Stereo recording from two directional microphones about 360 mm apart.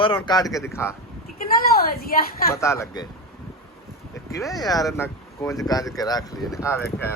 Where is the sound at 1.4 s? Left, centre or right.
Left.